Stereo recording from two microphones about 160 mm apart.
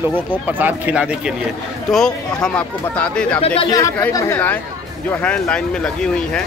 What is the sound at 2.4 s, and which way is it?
Speech, 10° left (ahead or behind).